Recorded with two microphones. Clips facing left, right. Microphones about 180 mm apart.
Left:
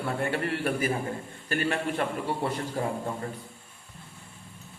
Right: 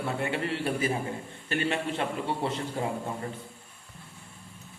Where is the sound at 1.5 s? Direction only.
20° right (ahead or behind).